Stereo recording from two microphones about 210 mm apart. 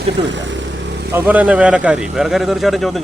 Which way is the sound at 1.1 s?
10° right (ahead or behind).